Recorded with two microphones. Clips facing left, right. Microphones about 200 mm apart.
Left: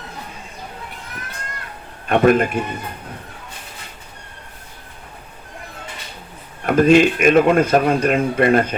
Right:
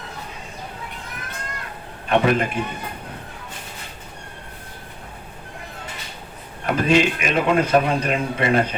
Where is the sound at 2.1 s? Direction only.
50° left (ahead or behind).